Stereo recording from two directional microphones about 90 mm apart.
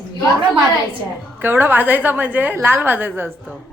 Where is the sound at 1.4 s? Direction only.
25° right (ahead or behind).